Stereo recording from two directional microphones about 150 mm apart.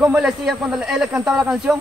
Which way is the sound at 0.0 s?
5° right (ahead or behind).